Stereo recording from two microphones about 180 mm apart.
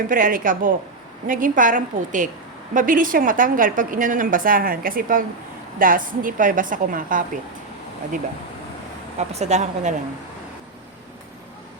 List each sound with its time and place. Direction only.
0.1 s a woman's voice: 50° right (ahead or behind)
9.1 s speech: 40° right (ahead or behind)